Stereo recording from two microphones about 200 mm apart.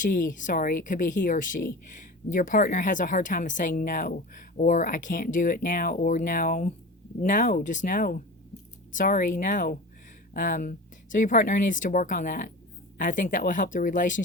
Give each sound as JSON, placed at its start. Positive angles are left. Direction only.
{"t": 0.0, "sound": "speech", "side_deg": 40}